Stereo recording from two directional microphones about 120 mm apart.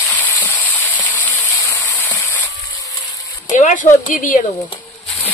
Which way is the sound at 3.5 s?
90° left.